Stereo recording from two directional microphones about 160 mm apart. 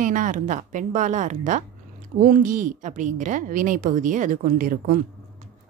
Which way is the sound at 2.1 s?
60° right (ahead or behind).